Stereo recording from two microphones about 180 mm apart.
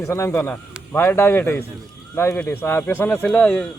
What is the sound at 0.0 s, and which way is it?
Speech, 15° left (ahead or behind).